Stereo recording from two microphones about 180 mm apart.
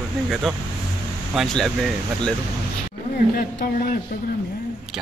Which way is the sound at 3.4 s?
55° left (ahead or behind).